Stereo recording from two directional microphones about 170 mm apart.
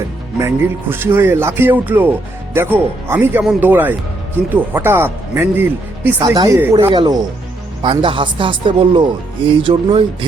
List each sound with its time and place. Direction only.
0.4 s speech: 15° right (ahead or behind)
6.1 s speech: 25° right (ahead or behind)
6.9 s speech: 25° right (ahead or behind)